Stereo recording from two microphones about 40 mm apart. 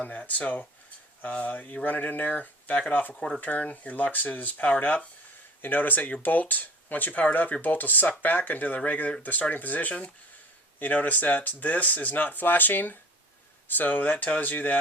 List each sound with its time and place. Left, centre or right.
0.0 s speech: left
5.6 s speech: left